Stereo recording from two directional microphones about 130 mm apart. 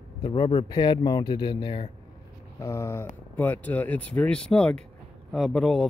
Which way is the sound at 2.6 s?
20° left (ahead or behind).